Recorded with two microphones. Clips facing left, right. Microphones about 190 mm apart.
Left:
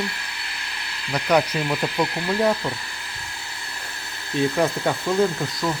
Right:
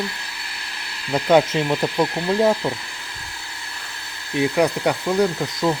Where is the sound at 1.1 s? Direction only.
25° right (ahead or behind).